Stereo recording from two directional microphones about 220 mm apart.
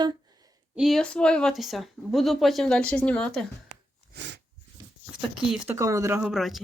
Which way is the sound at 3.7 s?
50° right (ahead or behind).